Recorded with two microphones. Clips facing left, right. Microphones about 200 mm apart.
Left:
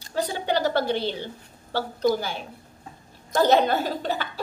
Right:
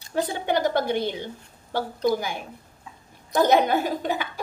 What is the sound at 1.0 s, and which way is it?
Speech, 20° right (ahead or behind).